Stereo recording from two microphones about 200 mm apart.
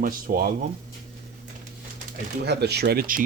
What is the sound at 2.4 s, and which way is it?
Speech, 55° right (ahead or behind).